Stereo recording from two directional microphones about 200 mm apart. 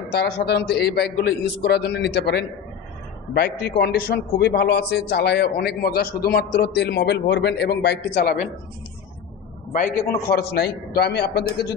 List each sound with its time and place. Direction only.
0.1 s a man's voice: 55° left (ahead or behind)
9.7 s a man's voice: 40° left (ahead or behind)
10.2 s a man's voice: 50° left (ahead or behind)